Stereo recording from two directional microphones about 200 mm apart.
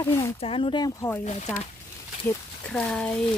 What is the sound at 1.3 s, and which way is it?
Speech, 35° left (ahead or behind).